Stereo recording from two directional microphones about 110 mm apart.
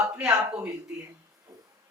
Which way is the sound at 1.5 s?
30° right (ahead or behind).